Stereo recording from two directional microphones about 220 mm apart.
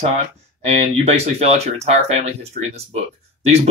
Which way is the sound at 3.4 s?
30° right (ahead or behind).